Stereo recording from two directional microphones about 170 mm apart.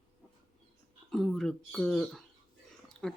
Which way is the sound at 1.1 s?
5° left (ahead or behind).